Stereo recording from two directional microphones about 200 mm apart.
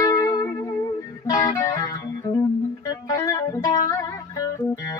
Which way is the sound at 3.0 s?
15° left (ahead or behind).